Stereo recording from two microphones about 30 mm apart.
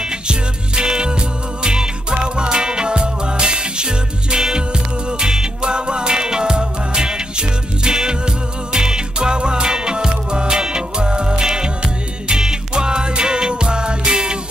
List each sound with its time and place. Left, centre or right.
0.0 s music: right